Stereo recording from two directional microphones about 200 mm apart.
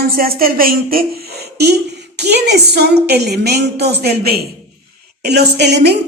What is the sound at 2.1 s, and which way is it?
A woman's voice, 55° right (ahead or behind).